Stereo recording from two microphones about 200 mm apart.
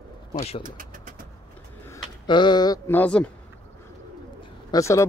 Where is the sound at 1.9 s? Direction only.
20° left (ahead or behind).